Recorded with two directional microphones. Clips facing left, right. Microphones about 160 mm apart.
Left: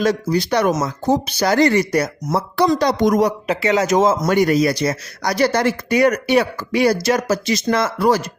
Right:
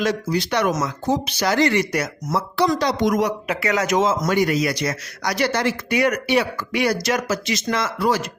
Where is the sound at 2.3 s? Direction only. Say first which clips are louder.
Left 3 dB; 45° left (ahead or behind).